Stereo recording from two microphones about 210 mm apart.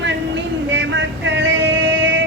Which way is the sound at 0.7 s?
60° right (ahead or behind).